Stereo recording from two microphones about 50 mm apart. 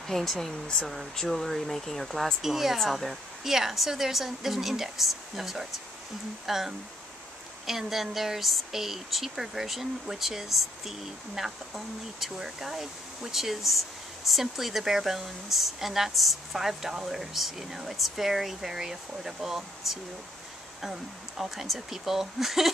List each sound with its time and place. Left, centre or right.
0.0 s speech: centre